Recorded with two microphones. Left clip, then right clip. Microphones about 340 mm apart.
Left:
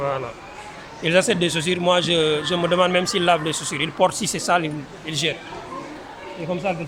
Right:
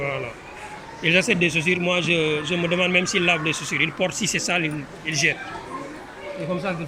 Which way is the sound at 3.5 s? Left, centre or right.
Left.